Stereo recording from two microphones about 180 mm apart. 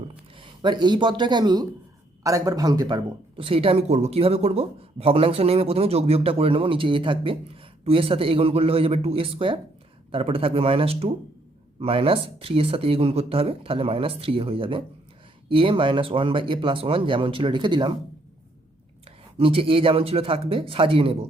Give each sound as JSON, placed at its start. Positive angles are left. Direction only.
{"t": 0.3, "sound": "speech", "side_deg": -25}
{"t": 19.0, "sound": "speech", "side_deg": -30}